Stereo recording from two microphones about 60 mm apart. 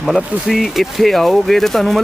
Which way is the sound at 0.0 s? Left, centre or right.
Centre.